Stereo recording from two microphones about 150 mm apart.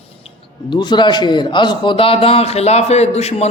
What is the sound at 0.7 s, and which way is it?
A man's voice, 30° left (ahead or behind).